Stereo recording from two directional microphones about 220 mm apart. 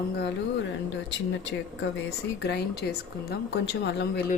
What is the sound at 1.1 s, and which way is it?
Speech, 55° left (ahead or behind).